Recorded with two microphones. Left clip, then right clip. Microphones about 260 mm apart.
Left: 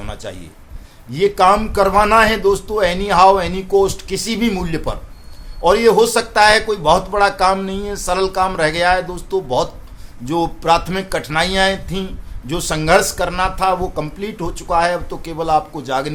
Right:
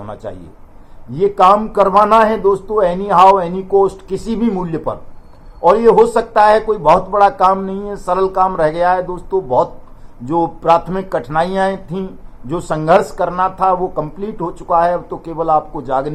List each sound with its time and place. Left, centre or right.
0.0 s a man's voice: left